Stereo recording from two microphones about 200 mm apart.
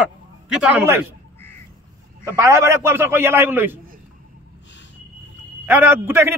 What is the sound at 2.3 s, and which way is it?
A man's voice, 15° right (ahead or behind).